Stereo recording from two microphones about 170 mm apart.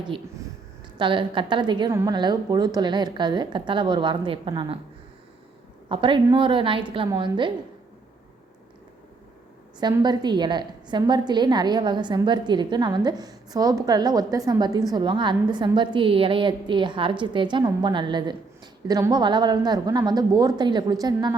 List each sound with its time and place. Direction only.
0.9 s a woman's voice: 30° right (ahead or behind)
5.9 s a woman's voice: 30° right (ahead or behind)
10.0 s a woman's voice: 25° right (ahead or behind)